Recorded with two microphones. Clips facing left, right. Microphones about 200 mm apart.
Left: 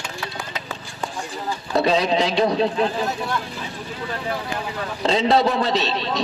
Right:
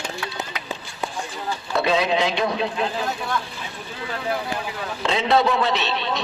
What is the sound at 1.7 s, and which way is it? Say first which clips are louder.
Speech: left 2 dB; 40° left (ahead or behind).